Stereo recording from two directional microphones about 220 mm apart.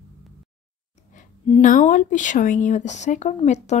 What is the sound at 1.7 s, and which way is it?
Speech, 35° left (ahead or behind).